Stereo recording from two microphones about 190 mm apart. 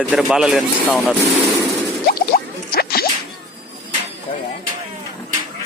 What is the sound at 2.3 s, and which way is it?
Music, 55° left (ahead or behind).